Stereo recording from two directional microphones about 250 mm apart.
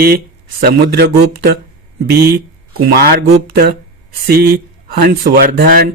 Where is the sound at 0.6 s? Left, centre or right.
Right.